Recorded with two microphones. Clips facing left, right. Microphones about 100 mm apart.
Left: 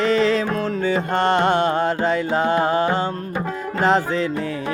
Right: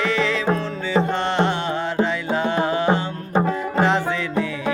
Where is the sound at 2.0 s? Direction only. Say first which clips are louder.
Left 3 dB; 40° left (ahead or behind).